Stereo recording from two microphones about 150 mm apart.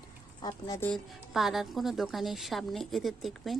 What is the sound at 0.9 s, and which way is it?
Speech, centre (ahead or behind).